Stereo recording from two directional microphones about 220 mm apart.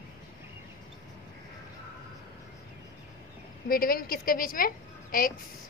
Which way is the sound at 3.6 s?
40° left (ahead or behind).